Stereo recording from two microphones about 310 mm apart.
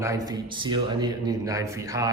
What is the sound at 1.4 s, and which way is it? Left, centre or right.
Speech, centre.